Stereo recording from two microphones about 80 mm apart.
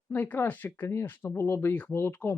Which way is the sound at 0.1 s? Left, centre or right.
Left.